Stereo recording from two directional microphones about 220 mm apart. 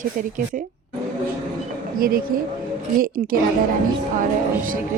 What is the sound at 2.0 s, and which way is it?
Speech, 40° right (ahead or behind).